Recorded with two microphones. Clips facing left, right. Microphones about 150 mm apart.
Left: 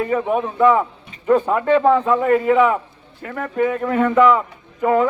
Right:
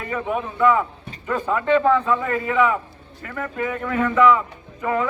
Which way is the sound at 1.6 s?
40° left (ahead or behind).